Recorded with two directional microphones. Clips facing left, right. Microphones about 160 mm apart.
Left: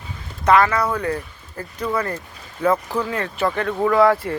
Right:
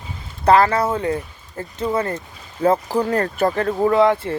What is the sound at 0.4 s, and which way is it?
Speech, 30° right (ahead or behind).